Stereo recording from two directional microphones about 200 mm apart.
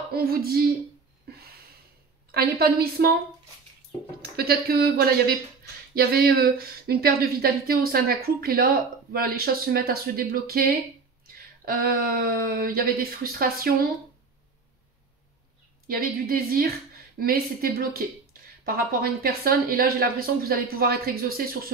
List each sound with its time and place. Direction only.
0.1 s speech: 50° right (ahead or behind)
1.3 s a sound: 50° right (ahead or behind)
2.3 s speech: 50° right (ahead or behind)
4.2 s speech: 50° right (ahead or behind)
15.9 s speech: 50° right (ahead or behind)